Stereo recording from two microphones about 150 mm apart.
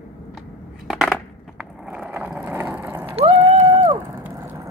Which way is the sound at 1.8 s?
5° right (ahead or behind).